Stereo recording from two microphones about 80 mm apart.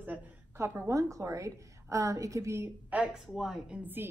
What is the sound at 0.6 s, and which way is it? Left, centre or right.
A woman's voice, right.